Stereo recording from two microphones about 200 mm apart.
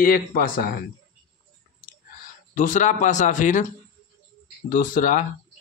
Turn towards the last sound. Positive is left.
turn(degrees=40)  # may be behind; listen again after turning